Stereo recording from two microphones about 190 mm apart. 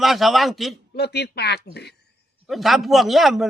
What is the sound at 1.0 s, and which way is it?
Speech, 60° left (ahead or behind).